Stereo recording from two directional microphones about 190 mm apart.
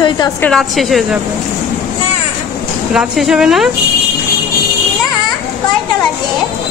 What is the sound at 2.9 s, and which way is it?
Speech, centre (ahead or behind).